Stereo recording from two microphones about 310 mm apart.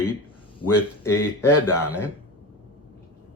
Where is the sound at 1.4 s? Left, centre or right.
Centre.